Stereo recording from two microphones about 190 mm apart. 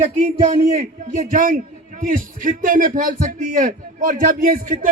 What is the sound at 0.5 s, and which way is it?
A man's voice, 35° right (ahead or behind).